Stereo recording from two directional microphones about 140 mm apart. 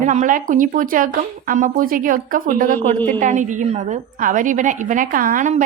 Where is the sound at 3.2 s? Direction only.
65° right (ahead or behind).